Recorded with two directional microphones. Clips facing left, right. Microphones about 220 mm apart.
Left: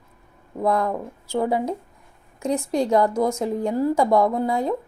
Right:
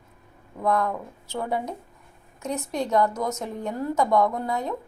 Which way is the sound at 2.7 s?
35° left (ahead or behind).